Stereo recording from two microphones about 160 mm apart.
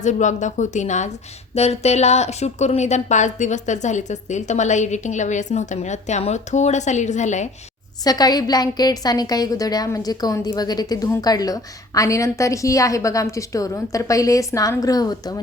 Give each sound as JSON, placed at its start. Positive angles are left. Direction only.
{"t": 0.0, "sound": "a woman's voice", "side_deg": 50}
{"t": 8.0, "sound": "a woman's voice", "side_deg": 25}